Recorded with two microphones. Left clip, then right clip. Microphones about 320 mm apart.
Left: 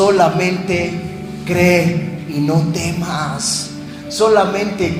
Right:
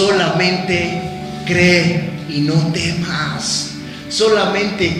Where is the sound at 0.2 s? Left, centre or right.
Centre.